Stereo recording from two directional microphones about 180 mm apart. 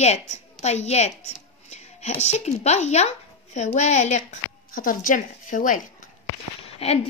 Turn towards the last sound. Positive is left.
turn(degrees=35)  # may be behind; listen again after turning